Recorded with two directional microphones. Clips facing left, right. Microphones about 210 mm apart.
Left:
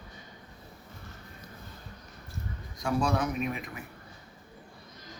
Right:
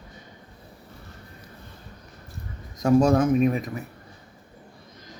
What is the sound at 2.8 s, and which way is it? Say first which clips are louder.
Speech: right 10 dB; 45° right (ahead or behind).